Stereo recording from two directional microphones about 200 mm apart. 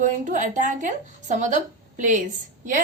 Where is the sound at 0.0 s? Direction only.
40° right (ahead or behind).